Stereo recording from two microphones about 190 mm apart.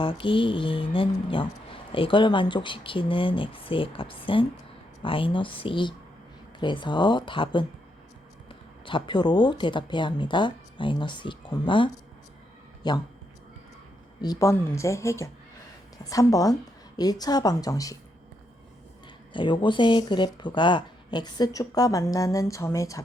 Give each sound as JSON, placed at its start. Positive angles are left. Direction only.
{"t": 0.0, "sound": "speech", "side_deg": 25}
{"t": 14.2, "sound": "speech", "side_deg": 20}
{"t": 19.3, "sound": "speech", "side_deg": 25}